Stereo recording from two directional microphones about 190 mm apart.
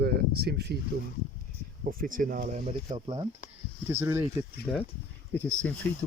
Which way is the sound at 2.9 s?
25° right (ahead or behind).